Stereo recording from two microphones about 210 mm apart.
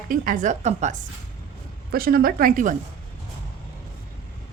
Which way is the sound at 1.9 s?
45° right (ahead or behind).